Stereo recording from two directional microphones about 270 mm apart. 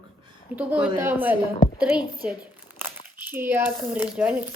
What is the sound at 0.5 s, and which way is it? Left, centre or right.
Speech, centre.